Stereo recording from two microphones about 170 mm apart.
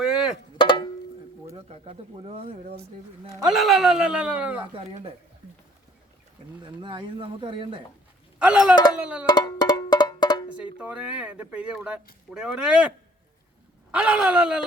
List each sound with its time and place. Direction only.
0.0 s a sound: 5° right (ahead or behind)
0.6 s music: 30° left (ahead or behind)
1.5 s speech: 35° right (ahead or behind)
3.5 s speech: centre (ahead or behind)
4.7 s speech: 30° right (ahead or behind)
6.7 s speech: 30° right (ahead or behind)
8.4 s speech: 5° right (ahead or behind)
9.2 s music: 25° left (ahead or behind)
10.8 s speech: 5° right (ahead or behind)
13.9 s speech: 5° right (ahead or behind)